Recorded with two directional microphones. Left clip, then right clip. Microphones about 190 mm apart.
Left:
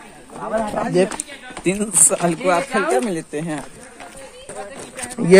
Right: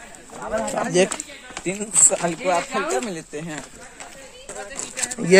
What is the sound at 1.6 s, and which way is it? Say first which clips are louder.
Speech: left 2 dB; 50° left (ahead or behind).